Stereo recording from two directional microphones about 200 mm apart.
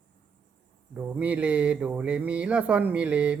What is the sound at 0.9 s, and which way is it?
Speech, 5° right (ahead or behind).